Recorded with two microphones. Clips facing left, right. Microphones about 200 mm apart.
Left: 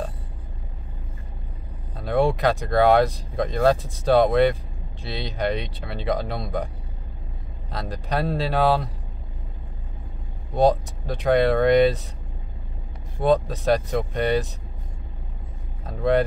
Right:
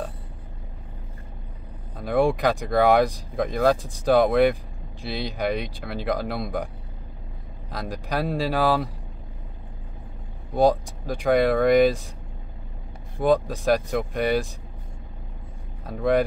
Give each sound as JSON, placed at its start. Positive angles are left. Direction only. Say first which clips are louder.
{"t": 2.0, "sound": "speech", "louder": "even", "side_deg": -15}
{"t": 7.7, "sound": "speech", "louder": "left 1 dB", "side_deg": -10}
{"t": 10.5, "sound": "speech", "louder": "even", "side_deg": -10}
{"t": 13.2, "sound": "speech", "louder": "even", "side_deg": -10}
{"t": 15.8, "sound": "speech", "louder": "even", "side_deg": -10}